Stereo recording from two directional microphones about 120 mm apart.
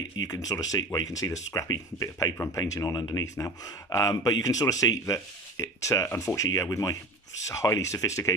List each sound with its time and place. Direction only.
0.3 s speech: 30° left (ahead or behind)